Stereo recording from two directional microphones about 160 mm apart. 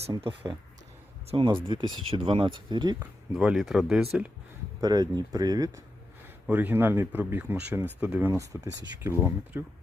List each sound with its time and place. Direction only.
0.2 s speech: 30° right (ahead or behind)
3.0 s speech: 5° right (ahead or behind)
4.8 s speech: 25° right (ahead or behind)
6.5 s speech: 10° right (ahead or behind)